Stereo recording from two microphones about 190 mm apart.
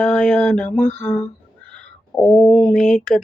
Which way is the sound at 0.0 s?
5° left (ahead or behind).